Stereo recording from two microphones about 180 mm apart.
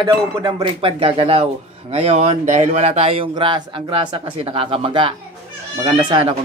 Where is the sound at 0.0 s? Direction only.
25° right (ahead or behind).